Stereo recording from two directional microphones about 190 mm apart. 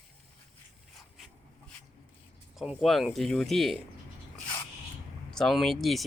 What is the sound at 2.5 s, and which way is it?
Speech, 5° right (ahead or behind).